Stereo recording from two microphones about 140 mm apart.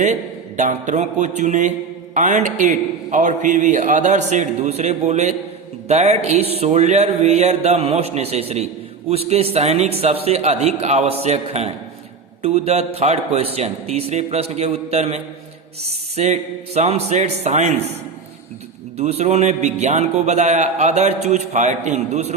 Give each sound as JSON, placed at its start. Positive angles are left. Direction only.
{"t": 0.0, "sound": "a man's voice", "side_deg": -60}
{"t": 18.9, "sound": "a man's voice", "side_deg": -50}